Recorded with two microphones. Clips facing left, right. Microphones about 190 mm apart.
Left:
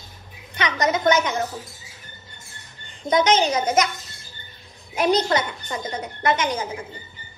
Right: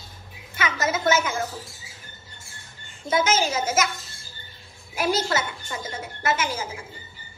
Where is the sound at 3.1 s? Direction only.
5° right (ahead or behind).